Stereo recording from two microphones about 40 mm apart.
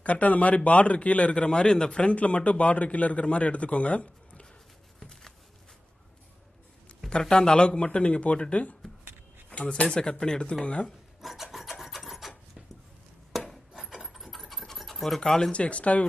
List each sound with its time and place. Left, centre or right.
0.0 s a man's voice: left
1.3 s a man's voice: left
5.0 s a sound: centre
7.1 s speech: centre
11.1 s rub: centre
13.5 s a sound: centre
15.5 s a man's voice: left